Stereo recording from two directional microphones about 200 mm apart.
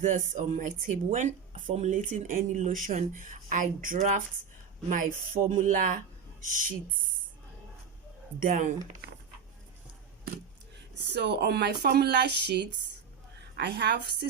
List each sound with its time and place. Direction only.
0.0 s speech: 40° right (ahead or behind)
8.4 s speech: 45° right (ahead or behind)
11.0 s speech: 55° right (ahead or behind)